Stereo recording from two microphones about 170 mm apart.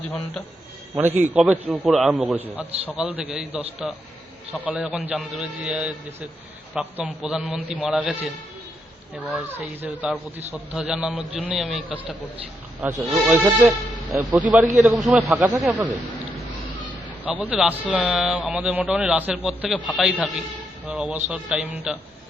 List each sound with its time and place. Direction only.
0.9 s a man's voice: 10° right (ahead or behind)
9.3 s a man's voice: 10° right (ahead or behind)
15.4 s speech: 20° right (ahead or behind)
17.4 s a man's voice: 5° right (ahead or behind)